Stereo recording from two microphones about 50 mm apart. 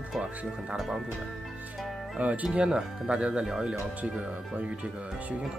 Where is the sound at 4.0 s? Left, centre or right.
Right.